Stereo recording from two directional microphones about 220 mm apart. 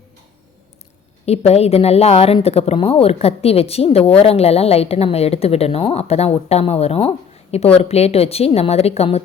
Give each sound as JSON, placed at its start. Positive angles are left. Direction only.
{"t": 1.2, "sound": "a woman's voice", "side_deg": 30}